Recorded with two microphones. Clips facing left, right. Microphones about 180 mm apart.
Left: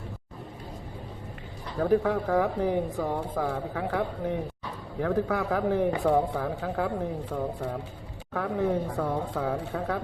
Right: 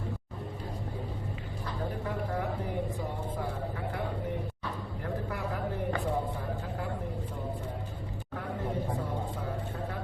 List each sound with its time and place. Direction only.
1.8 s a man's voice: 75° left (ahead or behind)
6.1 s speech: 80° left